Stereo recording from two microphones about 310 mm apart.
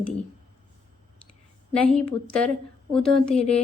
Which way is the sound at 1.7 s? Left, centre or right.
Centre.